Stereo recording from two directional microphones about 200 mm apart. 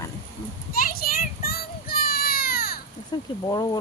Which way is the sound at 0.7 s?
45° left (ahead or behind).